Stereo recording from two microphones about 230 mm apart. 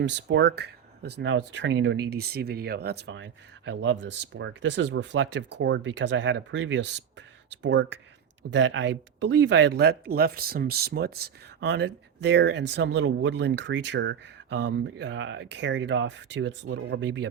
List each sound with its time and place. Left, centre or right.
0.0 s speech: right